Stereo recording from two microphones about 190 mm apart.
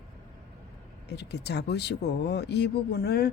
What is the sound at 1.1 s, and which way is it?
Speech, 60° left (ahead or behind).